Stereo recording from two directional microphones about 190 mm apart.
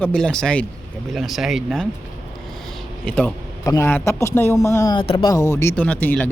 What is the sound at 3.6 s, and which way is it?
Speech, 15° left (ahead or behind).